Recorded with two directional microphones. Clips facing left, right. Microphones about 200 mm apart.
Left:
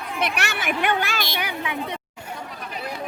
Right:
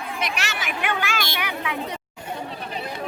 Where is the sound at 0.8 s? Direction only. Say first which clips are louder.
Left 1 dB; 35° left (ahead or behind).